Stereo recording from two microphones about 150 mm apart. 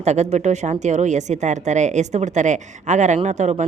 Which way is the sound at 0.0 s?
50° right (ahead or behind).